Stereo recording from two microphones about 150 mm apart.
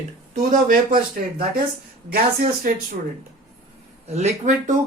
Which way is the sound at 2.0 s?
85° right.